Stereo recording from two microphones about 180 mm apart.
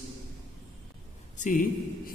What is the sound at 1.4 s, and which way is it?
Speech, 50° left (ahead or behind).